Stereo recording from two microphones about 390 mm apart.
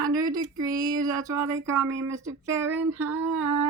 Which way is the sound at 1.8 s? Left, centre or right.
Right.